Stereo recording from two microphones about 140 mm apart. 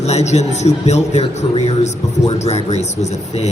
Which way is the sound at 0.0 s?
55° left (ahead or behind).